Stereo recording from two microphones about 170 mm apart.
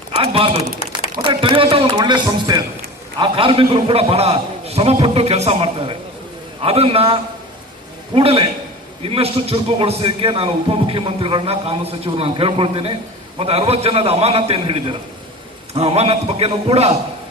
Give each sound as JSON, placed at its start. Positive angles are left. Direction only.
{"t": 0.2, "sound": "speech", "side_deg": -30}